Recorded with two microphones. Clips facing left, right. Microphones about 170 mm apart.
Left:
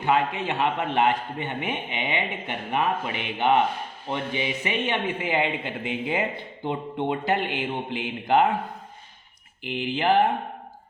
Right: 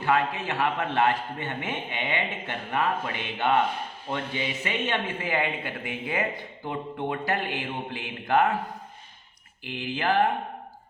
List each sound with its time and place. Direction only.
0.0 s a man's voice: 20° left (ahead or behind)
9.6 s a man's voice: 20° left (ahead or behind)